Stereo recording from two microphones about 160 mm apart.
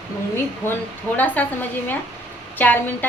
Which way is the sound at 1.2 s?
10° left (ahead or behind).